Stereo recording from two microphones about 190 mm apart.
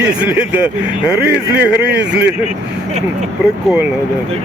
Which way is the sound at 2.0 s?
65° right (ahead or behind).